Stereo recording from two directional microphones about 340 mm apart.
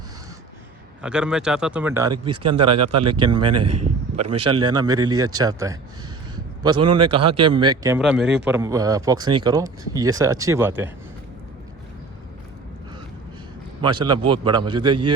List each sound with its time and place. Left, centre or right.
1.0 s speech: centre
2.5 s speech: right
3.0 s speech: centre
3.5 s speech: right
4.6 s speech: centre
6.3 s a sound: centre
6.8 s speech: centre
13.8 s speech: centre